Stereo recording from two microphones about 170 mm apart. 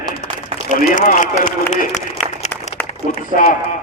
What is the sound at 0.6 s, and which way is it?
Speech, 50° left (ahead or behind).